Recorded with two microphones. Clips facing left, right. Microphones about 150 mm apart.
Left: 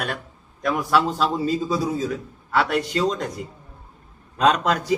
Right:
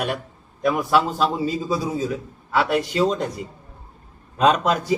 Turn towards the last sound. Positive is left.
turn(degrees=-5)  # may be behind; listen again after turning